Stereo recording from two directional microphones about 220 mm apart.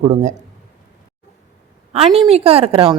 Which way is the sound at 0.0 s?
30° right (ahead or behind).